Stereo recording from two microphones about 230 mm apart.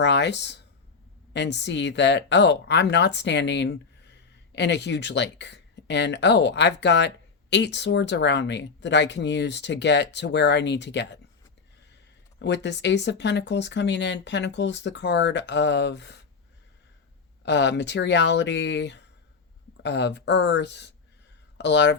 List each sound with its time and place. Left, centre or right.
0.0 s speech: left
12.4 s speech: left
17.4 s speech: left